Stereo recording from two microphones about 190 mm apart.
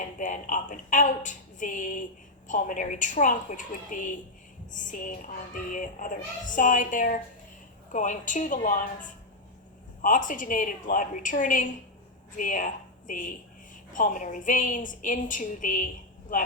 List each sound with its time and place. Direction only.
0.2 s a woman's voice: 40° left (ahead or behind)